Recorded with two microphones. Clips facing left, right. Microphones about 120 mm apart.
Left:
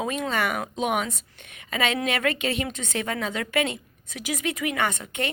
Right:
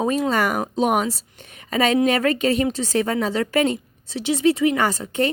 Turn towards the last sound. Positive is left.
turn(degrees=-35)  # may be behind; listen again after turning